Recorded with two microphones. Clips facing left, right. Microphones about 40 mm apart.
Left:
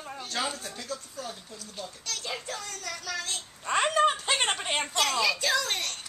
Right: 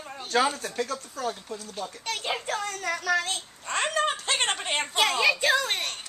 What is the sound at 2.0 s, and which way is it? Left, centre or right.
A child's voice, right.